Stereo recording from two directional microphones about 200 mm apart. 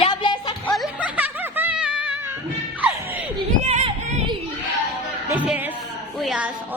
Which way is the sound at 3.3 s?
30° right (ahead or behind).